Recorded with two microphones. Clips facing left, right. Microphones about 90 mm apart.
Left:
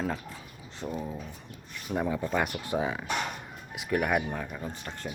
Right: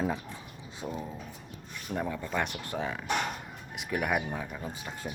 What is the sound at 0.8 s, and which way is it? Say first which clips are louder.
Speech: left 2 dB; 10° right (ahead or behind).